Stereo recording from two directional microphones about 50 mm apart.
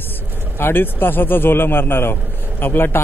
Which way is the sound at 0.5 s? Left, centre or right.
Left.